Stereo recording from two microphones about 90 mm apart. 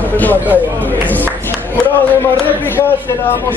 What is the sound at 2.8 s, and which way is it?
Speech, 25° left (ahead or behind).